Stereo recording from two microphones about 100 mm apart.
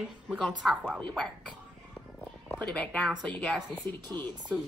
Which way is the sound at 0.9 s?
5° left (ahead or behind).